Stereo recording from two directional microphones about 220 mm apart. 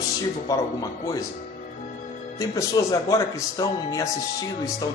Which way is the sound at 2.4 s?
15° left (ahead or behind).